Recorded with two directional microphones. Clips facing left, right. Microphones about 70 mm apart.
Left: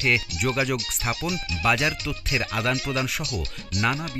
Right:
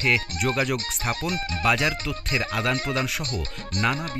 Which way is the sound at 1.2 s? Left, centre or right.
Right.